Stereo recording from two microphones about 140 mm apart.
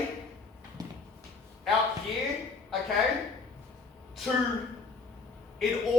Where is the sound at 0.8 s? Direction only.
25° right (ahead or behind).